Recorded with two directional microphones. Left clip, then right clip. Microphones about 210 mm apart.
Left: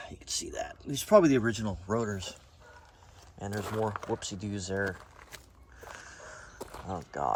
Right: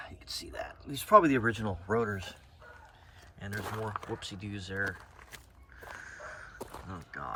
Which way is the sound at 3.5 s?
Centre (ahead or behind).